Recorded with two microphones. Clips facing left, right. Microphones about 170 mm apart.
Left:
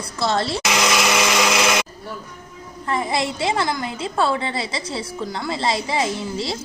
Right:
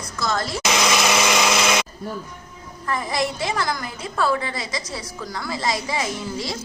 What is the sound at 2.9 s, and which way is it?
A woman's voice, 25° left (ahead or behind).